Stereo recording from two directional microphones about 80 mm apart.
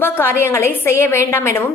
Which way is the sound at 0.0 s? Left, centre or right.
Left.